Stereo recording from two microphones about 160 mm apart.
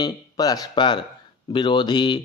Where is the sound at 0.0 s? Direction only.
25° left (ahead or behind).